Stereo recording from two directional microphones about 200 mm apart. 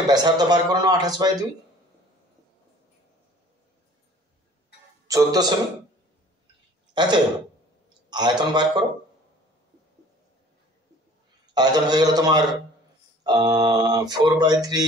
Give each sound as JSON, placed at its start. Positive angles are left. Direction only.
{"t": 0.1, "sound": "speech", "side_deg": -20}
{"t": 5.0, "sound": "a man's voice", "side_deg": -20}
{"t": 6.9, "sound": "a sound", "side_deg": -20}
{"t": 8.1, "sound": "speech", "side_deg": -20}
{"t": 11.5, "sound": "speech", "side_deg": -20}